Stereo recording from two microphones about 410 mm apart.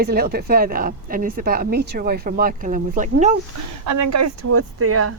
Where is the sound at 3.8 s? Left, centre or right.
Right.